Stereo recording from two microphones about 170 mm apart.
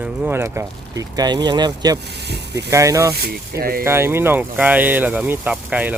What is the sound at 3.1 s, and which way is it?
Speech, 65° right (ahead or behind).